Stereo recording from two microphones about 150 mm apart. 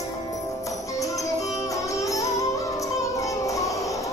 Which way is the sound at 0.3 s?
20° left (ahead or behind).